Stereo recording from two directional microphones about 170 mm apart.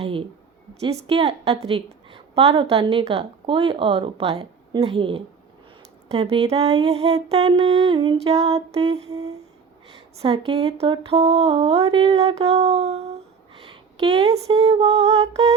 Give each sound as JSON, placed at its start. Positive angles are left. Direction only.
{"t": 0.0, "sound": "a sound", "side_deg": -30}
{"t": 0.7, "sound": "mantra", "side_deg": -35}
{"t": 10.4, "sound": "mantra", "side_deg": -35}